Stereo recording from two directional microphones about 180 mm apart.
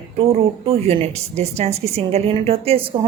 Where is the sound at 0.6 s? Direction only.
30° right (ahead or behind).